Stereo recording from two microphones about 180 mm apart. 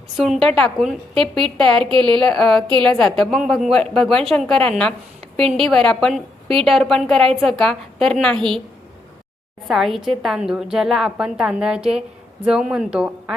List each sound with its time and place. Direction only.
0.2 s a woman's voice: centre (ahead or behind)
1.9 s a woman's voice: 25° right (ahead or behind)
2.2 s a woman's voice: centre (ahead or behind)
5.4 s a woman's voice: 30° right (ahead or behind)
5.6 s a woman's voice: 5° left (ahead or behind)
9.6 s a woman's voice: centre (ahead or behind)